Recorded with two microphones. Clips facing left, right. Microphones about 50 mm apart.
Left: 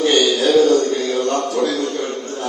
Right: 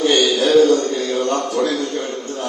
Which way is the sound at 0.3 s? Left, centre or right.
Right.